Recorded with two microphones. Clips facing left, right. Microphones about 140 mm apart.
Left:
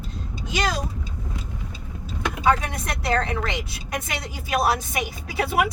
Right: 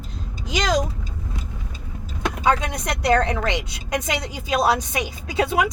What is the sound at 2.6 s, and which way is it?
A woman's voice, 20° right (ahead or behind).